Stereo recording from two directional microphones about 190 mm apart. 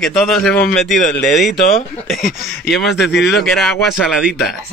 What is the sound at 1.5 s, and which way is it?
Speech, 45° left (ahead or behind).